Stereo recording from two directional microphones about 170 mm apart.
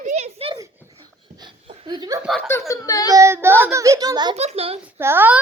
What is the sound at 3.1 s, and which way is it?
A child's voice, 15° right (ahead or behind).